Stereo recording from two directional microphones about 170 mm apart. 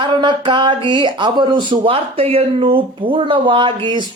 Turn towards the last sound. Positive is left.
turn(degrees=-30)  # may be behind; listen again after turning